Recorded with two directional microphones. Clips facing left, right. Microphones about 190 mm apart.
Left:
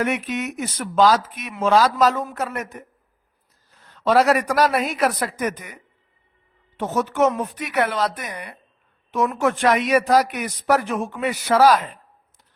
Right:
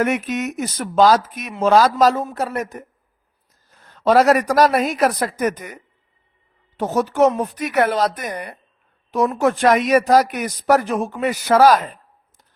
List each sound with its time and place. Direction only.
0.0 s a man's voice: 45° right (ahead or behind)